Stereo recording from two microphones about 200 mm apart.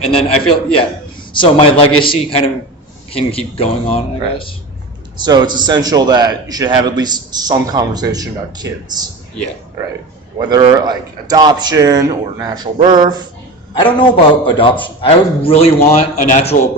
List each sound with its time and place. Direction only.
0.1 s a man's voice: 30° left (ahead or behind)
5.2 s a man's voice: 20° right (ahead or behind)
10.3 s a man's voice: 20° right (ahead or behind)
14.0 s a man's voice: 25° left (ahead or behind)